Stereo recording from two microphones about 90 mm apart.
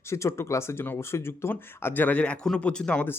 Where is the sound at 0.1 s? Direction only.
35° left (ahead or behind); by 3.1 s 15° left (ahead or behind).